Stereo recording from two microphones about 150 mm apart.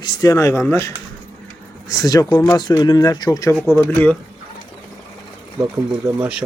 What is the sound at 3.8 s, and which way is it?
Speech, 10° left (ahead or behind).